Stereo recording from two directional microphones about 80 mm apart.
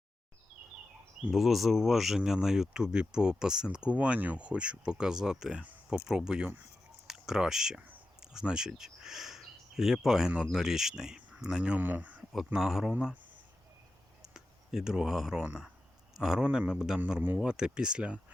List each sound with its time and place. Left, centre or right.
1.3 s speech: centre
12.5 s speech: centre
14.2 s speech: centre